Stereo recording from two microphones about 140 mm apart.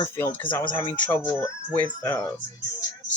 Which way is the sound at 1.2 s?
25° left (ahead or behind).